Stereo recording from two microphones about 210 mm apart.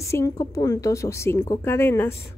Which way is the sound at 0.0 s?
15° left (ahead or behind).